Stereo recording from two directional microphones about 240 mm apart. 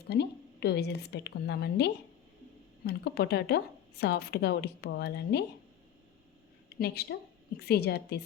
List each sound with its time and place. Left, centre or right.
0.1 s a woman's voice: left
6.7 s a woman's voice: left